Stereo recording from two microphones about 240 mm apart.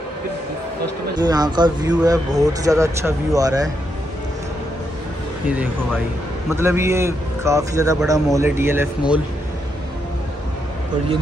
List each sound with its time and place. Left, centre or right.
1.1 s speech: centre
6.5 s speech: centre